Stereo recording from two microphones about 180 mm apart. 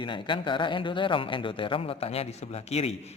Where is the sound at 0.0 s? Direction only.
25° left (ahead or behind).